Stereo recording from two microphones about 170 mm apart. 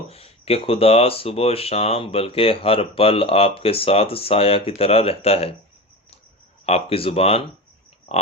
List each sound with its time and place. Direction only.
0.1 s speech: 35° left (ahead or behind)
6.7 s speech: 35° left (ahead or behind)